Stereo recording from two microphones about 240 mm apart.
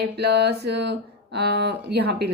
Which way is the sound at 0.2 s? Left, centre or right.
Right.